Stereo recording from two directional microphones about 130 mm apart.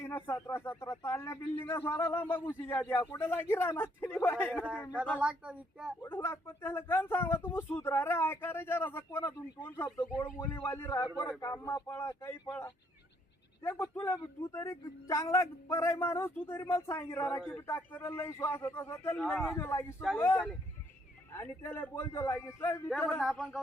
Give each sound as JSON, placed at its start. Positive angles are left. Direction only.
{"t": 0.0, "sound": "a man's voice", "side_deg": 15}
{"t": 5.2, "sound": "speech", "side_deg": -5}
{"t": 6.0, "sound": "a man's voice", "side_deg": 20}
{"t": 13.7, "sound": "a man's voice", "side_deg": 20}
{"t": 23.3, "sound": "a sound", "side_deg": 5}